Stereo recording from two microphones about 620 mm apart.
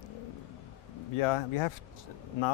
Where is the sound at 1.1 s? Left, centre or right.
Left.